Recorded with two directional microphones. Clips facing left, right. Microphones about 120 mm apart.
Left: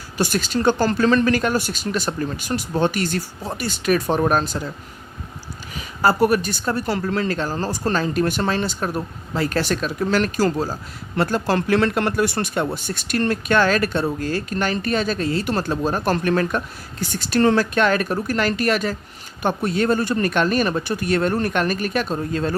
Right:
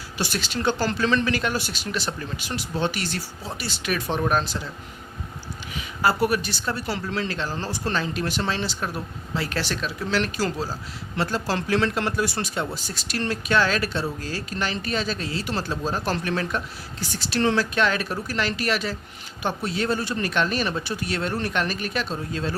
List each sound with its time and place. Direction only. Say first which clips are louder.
0.2 s speech: left 6 dB; 45° left (ahead or behind)
5.7 s speech: left 4 dB; 40° left (ahead or behind)